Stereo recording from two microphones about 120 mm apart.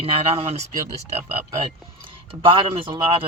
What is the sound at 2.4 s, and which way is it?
Speech, 50° right (ahead or behind).